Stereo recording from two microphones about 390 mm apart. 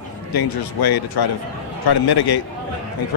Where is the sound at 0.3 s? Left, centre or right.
Left.